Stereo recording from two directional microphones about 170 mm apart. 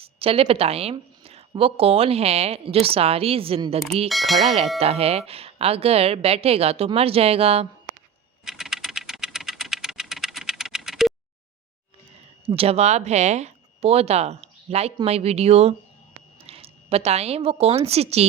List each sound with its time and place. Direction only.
0.0 s a woman's voice: 35° right (ahead or behind)
4.1 s speech: centre (ahead or behind)
4.8 s a woman's voice: 35° right (ahead or behind)
8.4 s typing: centre (ahead or behind)
12.5 s a woman's voice: 35° right (ahead or behind)